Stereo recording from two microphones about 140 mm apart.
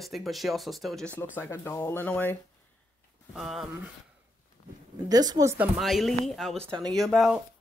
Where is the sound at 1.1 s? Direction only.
15° left (ahead or behind).